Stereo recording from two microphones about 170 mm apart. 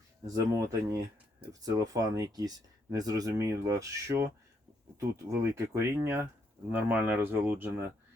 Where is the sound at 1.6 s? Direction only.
20° right (ahead or behind).